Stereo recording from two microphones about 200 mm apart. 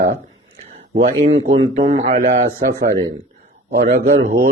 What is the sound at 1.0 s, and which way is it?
A man's voice, 35° right (ahead or behind).